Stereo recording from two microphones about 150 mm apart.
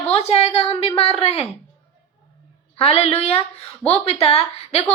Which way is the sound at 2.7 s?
40° left (ahead or behind).